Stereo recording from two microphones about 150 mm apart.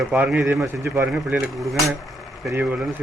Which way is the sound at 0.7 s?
20° right (ahead or behind).